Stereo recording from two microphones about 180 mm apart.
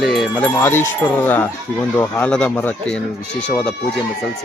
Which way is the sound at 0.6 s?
10° left (ahead or behind).